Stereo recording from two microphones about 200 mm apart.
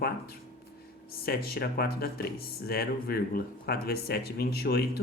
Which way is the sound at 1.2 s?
50° left (ahead or behind).